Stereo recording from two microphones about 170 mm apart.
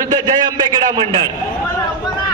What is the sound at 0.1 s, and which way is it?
A man's voice, 25° right (ahead or behind).